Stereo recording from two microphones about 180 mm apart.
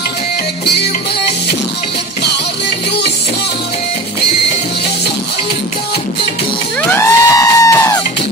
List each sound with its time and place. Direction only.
6.9 s music: 15° left (ahead or behind)